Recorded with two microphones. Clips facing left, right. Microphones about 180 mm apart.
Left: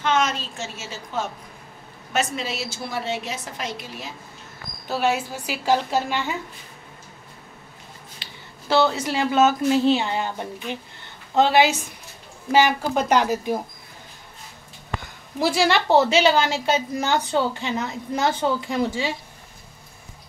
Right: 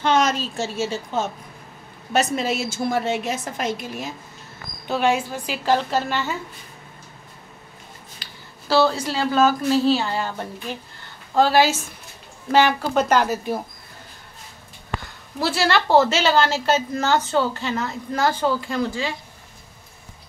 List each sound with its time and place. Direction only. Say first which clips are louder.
0.0 s a woman's voice: right 3 dB; 35° right (ahead or behind)
2.1 s a woman's voice: right 4 dB; 45° right (ahead or behind)
4.8 s a woman's voice: right 2 dB; 5° left (ahead or behind)
8.2 s a sound: left 1 dB; 20° left (ahead or behind)
9.1 s a woman's voice: even; 20° left (ahead or behind)
11.3 s a woman's voice: even; 20° left (ahead or behind)
15.4 s a woman's voice: left 1 dB; 15° left (ahead or behind)